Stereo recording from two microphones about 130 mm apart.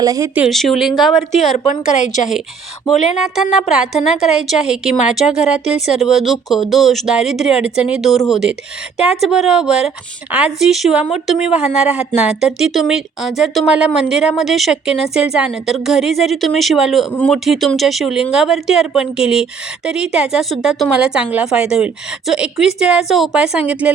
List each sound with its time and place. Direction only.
0.0 s speech: 25° right (ahead or behind)
0.3 s speech: centre (ahead or behind)
1.4 s a woman's voice: 65° left (ahead or behind)
3.0 s speech: 5° right (ahead or behind)
4.4 s a woman's voice: 5° right (ahead or behind)
17.1 s speech: 10° left (ahead or behind)
17.3 s a woman's voice: centre (ahead or behind)